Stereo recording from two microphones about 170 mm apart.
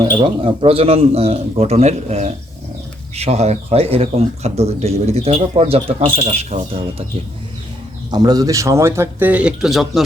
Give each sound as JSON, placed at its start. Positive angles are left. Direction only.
{"t": 0.0, "sound": "a man's voice", "side_deg": -30}
{"t": 8.1, "sound": "speech", "side_deg": -20}